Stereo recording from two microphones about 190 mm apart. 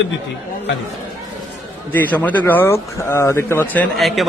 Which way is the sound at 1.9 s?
10° left (ahead or behind).